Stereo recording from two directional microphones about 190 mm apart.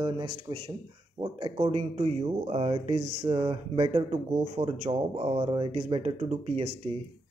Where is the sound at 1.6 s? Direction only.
35° right (ahead or behind).